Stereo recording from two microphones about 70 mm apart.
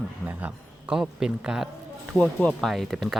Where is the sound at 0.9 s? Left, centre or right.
Centre.